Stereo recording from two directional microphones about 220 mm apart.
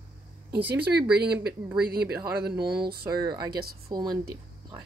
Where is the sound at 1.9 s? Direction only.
45° right (ahead or behind).